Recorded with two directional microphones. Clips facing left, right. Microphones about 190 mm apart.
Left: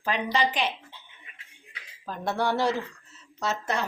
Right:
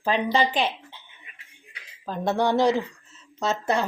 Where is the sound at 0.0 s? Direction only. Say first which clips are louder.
Right 4 dB; 30° right (ahead or behind).